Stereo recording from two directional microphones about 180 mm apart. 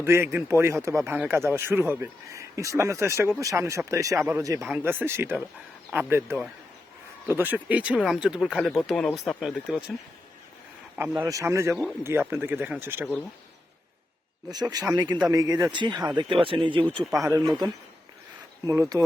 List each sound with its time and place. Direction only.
0.0 s speech: 15° right (ahead or behind)
10.9 s speech: 10° right (ahead or behind)
14.5 s speech: 20° right (ahead or behind)